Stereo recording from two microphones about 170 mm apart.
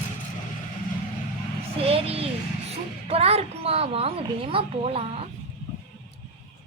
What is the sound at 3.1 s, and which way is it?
A woman's voice, 35° right (ahead or behind).